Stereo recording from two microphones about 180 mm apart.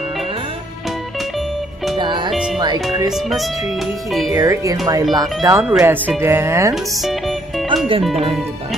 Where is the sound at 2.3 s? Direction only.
Centre (ahead or behind).